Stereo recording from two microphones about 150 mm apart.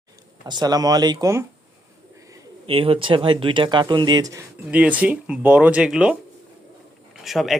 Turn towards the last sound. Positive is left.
turn(degrees=0)  # may be behind; listen again after turning